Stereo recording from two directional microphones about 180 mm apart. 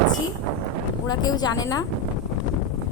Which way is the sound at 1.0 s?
20° left (ahead or behind).